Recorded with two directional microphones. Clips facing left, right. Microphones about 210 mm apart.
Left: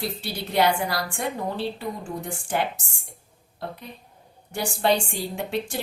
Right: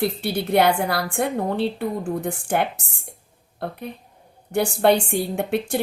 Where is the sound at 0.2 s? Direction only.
55° right (ahead or behind).